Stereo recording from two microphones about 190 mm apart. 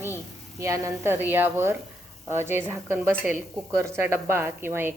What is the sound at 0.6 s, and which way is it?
A woman's voice, 15° right (ahead or behind).